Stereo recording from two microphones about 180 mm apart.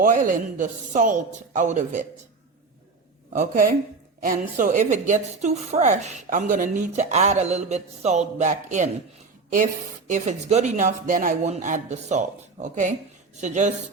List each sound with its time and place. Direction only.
0.0 s speech: 50° right (ahead or behind)
3.3 s a woman's voice: 45° right (ahead or behind)
10.1 s a woman's voice: 40° right (ahead or behind)